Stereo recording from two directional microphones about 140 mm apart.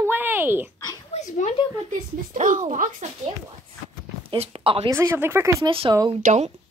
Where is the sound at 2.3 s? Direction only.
60° right (ahead or behind).